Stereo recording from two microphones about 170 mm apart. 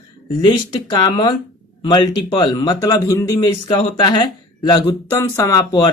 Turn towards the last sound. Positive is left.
turn(degrees=20)  # may be behind; listen again after turning